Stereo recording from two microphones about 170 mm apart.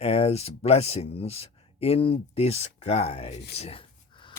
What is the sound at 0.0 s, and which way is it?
Speech, 35° left (ahead or behind).